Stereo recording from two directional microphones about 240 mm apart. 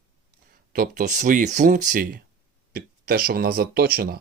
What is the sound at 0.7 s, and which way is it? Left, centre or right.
Speech, right.